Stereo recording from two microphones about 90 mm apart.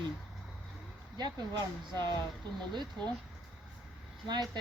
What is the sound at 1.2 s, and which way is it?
Speech, 50° right (ahead or behind).